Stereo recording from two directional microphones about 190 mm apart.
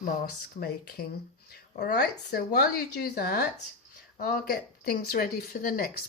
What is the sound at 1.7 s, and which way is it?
Speech, 55° left (ahead or behind).